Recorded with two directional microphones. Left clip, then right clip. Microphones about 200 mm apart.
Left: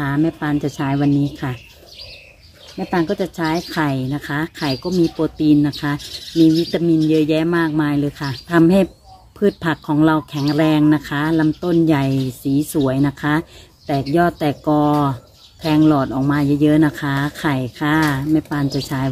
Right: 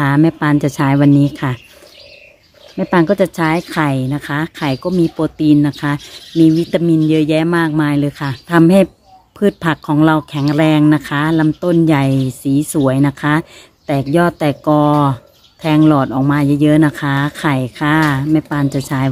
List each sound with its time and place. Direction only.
0.0 s speech: 50° right (ahead or behind)
2.8 s speech: 55° right (ahead or behind); by 19.0 s 35° right (ahead or behind)